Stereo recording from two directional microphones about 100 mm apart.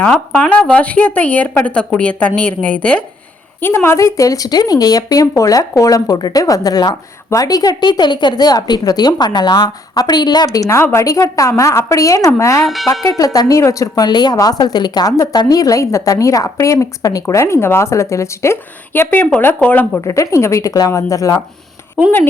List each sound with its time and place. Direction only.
0.0 s a woman's voice: 15° left (ahead or behind)
3.6 s a woman's voice: 20° left (ahead or behind)
12.6 s speech: centre (ahead or behind)
12.9 s a woman's voice: 35° left (ahead or behind); by 20.0 s 15° left (ahead or behind)
20.1 s a woman's voice: 30° left (ahead or behind)